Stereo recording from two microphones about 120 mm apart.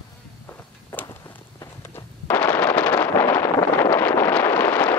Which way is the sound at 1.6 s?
20° left (ahead or behind).